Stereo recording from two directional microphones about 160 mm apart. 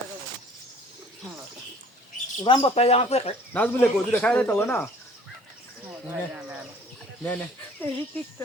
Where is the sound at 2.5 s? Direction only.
30° left (ahead or behind).